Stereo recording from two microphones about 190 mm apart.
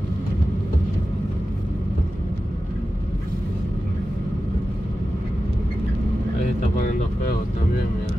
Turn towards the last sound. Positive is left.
turn(degrees=45)  # may be behind; listen again after turning